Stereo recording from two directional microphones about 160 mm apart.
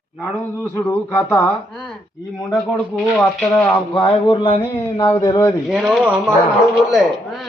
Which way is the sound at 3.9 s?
30° left (ahead or behind).